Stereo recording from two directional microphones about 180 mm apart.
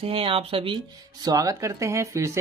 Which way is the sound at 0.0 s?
30° right (ahead or behind).